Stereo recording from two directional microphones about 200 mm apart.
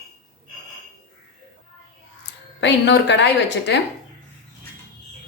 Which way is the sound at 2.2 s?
60° left (ahead or behind).